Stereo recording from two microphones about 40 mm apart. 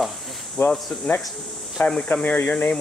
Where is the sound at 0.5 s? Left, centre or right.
Left.